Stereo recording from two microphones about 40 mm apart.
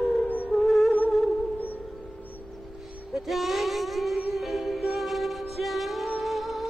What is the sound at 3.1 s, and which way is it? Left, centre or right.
Music, centre.